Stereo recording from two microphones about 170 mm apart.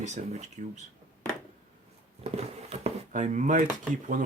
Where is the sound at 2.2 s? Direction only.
40° right (ahead or behind).